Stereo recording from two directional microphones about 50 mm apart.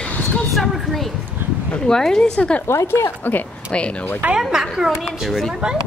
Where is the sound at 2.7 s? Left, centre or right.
Left.